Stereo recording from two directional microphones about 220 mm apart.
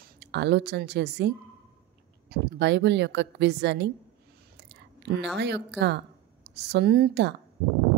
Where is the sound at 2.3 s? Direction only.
50° right (ahead or behind).